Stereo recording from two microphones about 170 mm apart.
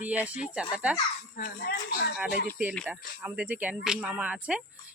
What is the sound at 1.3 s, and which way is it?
Speech, 60° left (ahead or behind).